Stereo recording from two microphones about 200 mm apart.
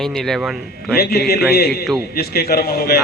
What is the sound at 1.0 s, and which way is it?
A man's voice, 50° left (ahead or behind).